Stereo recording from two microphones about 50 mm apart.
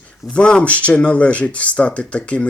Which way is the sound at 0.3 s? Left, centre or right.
Left.